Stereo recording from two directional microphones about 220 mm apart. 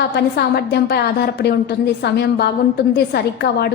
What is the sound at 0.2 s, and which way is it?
A woman's voice, 50° left (ahead or behind).